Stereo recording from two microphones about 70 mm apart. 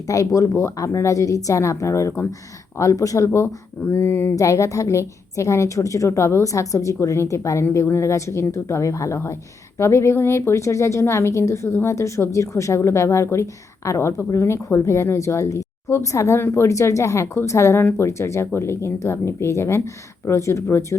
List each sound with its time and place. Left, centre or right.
0.3 s a woman's voice: left
4.4 s a woman's voice: left
17.8 s speech: left
18.2 s speech: left